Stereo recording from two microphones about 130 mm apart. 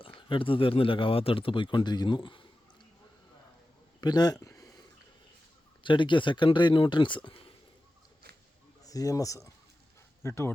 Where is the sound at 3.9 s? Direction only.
30° left (ahead or behind).